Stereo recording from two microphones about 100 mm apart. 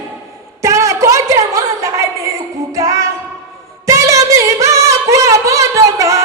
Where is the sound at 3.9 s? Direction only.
30° right (ahead or behind).